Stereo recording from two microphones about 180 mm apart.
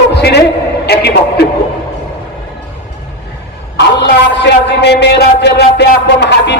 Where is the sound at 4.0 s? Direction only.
80° left.